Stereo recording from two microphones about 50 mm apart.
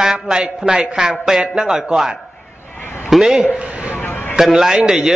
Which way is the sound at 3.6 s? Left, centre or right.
Right.